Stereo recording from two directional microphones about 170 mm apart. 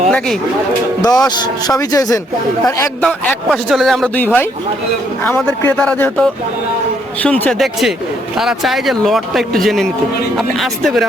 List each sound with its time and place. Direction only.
1.0 s speech: 20° left (ahead or behind)
3.0 s speech: 5° left (ahead or behind)